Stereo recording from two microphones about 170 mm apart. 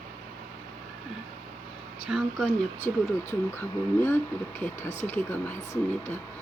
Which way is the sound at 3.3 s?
15° left (ahead or behind).